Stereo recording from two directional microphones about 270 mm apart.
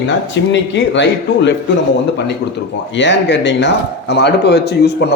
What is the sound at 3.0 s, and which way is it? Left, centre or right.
A man's voice, left.